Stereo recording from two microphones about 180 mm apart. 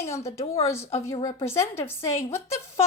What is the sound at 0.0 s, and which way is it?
A woman's voice, 15° left (ahead or behind).